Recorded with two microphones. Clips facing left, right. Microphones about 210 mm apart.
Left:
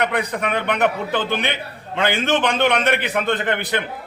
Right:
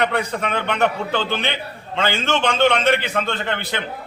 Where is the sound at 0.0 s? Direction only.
15° left (ahead or behind).